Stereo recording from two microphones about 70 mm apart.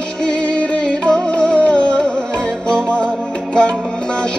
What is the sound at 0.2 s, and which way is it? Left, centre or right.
Music, centre.